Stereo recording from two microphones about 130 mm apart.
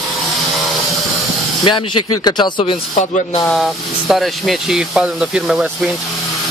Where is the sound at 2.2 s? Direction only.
35° left (ahead or behind).